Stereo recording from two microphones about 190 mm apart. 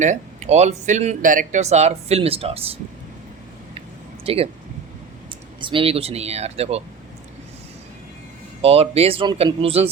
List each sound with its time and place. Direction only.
0.0 s speech: 40° right (ahead or behind)
4.2 s speech: 30° right (ahead or behind)
5.5 s speech: 25° right (ahead or behind)
8.6 s speech: 30° right (ahead or behind)